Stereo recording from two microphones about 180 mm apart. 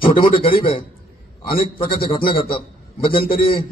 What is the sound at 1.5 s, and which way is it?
A man's voice, 55° left (ahead or behind).